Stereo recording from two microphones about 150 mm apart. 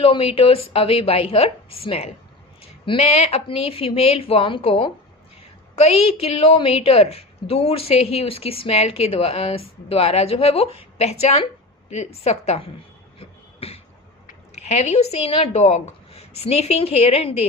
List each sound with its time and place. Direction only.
0.0 s a woman's voice: 40° left (ahead or behind)
13.1 s beatboxing: 40° left (ahead or behind)
14.3 s speech: 50° left (ahead or behind)